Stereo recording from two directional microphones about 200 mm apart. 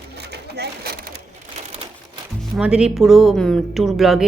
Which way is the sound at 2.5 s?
5° right (ahead or behind).